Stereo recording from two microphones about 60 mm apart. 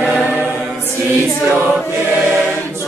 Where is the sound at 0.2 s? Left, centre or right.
Right.